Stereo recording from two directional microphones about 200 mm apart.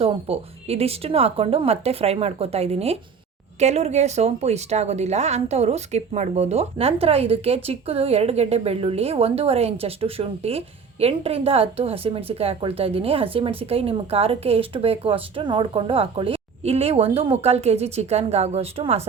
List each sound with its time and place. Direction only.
0.0 s a woman's voice: 30° right (ahead or behind)